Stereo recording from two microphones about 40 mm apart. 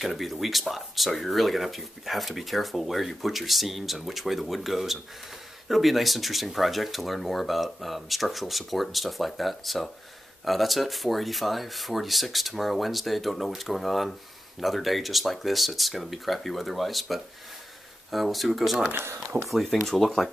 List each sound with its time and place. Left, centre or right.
0.0 s speech: centre
18.9 s speech: right
19.4 s speech: centre
19.8 s speech: centre